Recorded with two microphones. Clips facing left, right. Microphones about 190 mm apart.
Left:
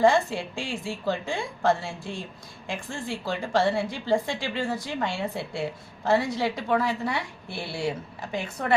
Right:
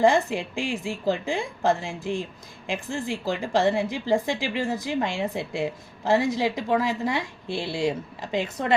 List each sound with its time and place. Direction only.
0.0 s a woman's voice: 20° right (ahead or behind)